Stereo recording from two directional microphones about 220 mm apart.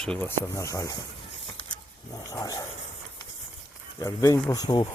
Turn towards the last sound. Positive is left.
turn(degrees=15)  # may be behind; listen again after turning